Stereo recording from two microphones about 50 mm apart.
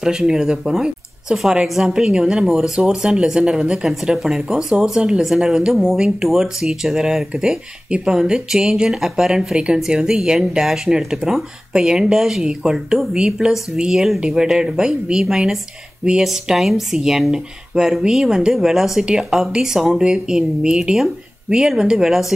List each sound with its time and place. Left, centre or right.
0.0 s speech: centre
2.0 s speech: centre